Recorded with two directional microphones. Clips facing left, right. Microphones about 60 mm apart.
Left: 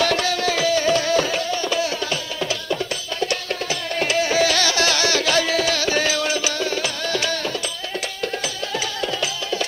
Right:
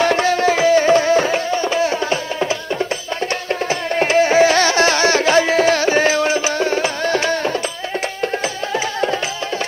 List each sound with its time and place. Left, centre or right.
0.0 s music: right